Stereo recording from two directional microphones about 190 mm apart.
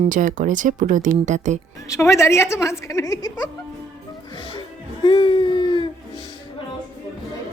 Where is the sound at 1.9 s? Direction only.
15° left (ahead or behind).